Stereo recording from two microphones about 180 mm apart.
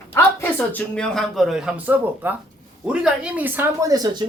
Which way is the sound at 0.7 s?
5° left (ahead or behind).